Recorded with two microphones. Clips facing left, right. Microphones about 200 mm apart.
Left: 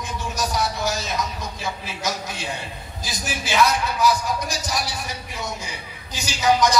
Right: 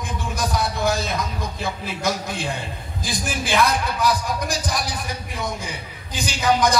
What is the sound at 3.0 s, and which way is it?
Speech, 55° right (ahead or behind).